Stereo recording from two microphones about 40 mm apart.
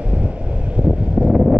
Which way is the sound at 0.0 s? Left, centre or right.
Right.